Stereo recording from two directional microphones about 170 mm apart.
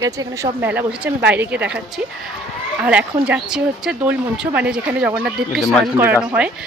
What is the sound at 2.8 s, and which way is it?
Speech, 5° right (ahead or behind).